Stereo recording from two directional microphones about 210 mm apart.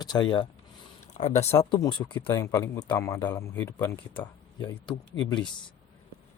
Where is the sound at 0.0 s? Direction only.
20° left (ahead or behind).